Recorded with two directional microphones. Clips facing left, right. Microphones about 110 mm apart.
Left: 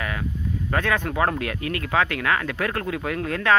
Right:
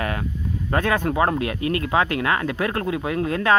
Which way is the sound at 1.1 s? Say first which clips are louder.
Right 2 dB; 20° right (ahead or behind).